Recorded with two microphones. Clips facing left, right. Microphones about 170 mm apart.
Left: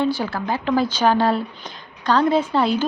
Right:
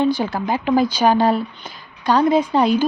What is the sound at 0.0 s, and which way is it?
A woman's voice, 15° right (ahead or behind).